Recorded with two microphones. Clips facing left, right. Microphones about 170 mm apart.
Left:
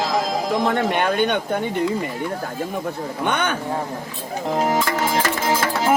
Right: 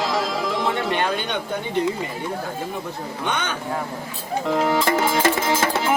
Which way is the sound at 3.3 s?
55° left (ahead or behind).